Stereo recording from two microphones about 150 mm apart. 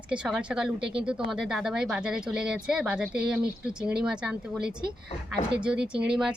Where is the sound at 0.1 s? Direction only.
5° right (ahead or behind).